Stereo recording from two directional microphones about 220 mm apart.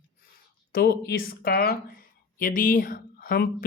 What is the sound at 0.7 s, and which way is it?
A woman's voice, 45° left (ahead or behind).